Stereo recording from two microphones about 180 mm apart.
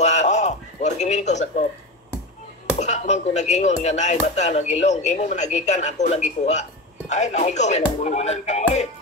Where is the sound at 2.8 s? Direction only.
40° left (ahead or behind).